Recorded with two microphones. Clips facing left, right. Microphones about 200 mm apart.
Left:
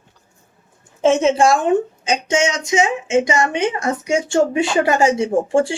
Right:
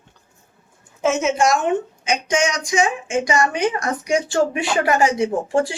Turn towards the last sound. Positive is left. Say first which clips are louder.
# left 3 dB
turn(degrees=30)  # may be behind; listen again after turning